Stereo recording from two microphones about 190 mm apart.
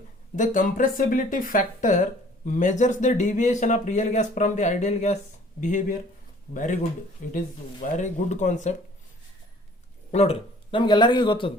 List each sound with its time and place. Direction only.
0.3 s speech: 45° left (ahead or behind)
10.1 s a man's voice: 35° left (ahead or behind)